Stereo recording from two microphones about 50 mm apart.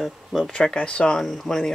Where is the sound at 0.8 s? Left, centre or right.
Centre.